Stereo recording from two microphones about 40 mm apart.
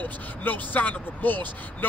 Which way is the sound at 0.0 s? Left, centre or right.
Left.